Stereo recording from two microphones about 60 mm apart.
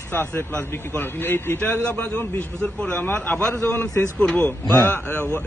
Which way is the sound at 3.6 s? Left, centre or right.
Left.